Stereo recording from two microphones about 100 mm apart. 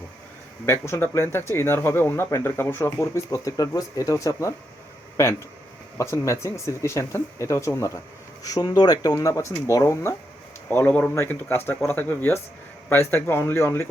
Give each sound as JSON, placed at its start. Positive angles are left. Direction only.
{"t": 0.6, "sound": "speech", "side_deg": 25}
{"t": 8.4, "sound": "speech", "side_deg": 40}